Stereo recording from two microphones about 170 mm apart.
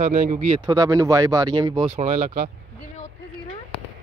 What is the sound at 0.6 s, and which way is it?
Speech, 20° right (ahead or behind).